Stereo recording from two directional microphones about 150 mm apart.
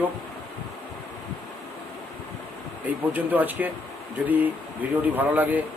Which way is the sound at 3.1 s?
10° right (ahead or behind).